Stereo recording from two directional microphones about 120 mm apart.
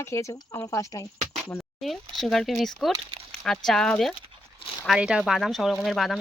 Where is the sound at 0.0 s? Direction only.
25° left (ahead or behind).